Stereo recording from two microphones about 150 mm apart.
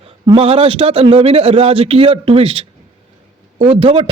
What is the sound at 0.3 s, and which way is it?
A man's voice, 40° right (ahead or behind).